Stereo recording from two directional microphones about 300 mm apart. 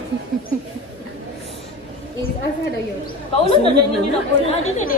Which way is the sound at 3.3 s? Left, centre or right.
Centre.